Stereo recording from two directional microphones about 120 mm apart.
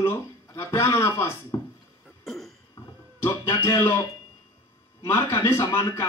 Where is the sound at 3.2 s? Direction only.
25° left (ahead or behind).